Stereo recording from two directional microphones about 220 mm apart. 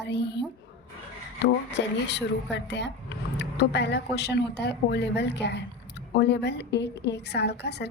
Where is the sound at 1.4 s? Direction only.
50° left (ahead or behind).